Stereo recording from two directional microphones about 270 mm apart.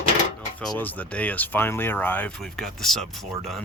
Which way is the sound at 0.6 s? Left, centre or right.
Centre.